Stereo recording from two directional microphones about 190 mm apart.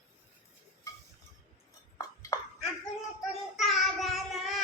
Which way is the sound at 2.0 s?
20° left (ahead or behind).